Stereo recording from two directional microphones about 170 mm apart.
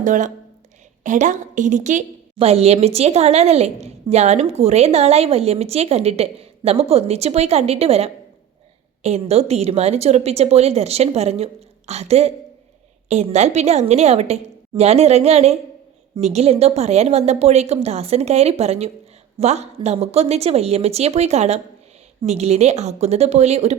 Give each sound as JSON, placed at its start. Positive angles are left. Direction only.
{"t": 0.0, "sound": "a woman's voice", "side_deg": -50}
{"t": 2.3, "sound": "a woman's voice", "side_deg": -35}
{"t": 9.3, "sound": "a woman's voice", "side_deg": -35}